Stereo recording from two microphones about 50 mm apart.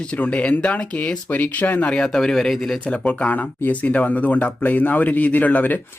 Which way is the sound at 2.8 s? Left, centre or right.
Left.